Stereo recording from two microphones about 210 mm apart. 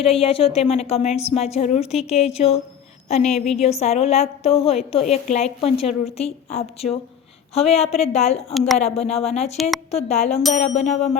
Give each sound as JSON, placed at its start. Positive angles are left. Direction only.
{"t": 0.0, "sound": "a woman's voice", "side_deg": 25}
{"t": 8.5, "sound": "a woman's voice", "side_deg": 0}
{"t": 8.8, "sound": "a woman's voice", "side_deg": 30}
{"t": 9.6, "sound": "a woman's voice", "side_deg": 0}
{"t": 9.9, "sound": "a woman's voice", "side_deg": 30}